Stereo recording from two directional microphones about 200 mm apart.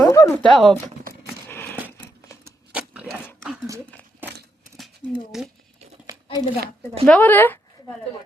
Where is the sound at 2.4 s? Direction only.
10° right (ahead or behind).